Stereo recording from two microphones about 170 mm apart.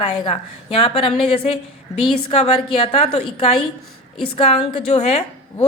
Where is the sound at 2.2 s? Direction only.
35° left (ahead or behind).